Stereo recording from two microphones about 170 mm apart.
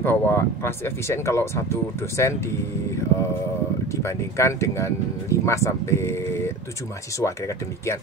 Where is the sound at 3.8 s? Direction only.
15° left (ahead or behind).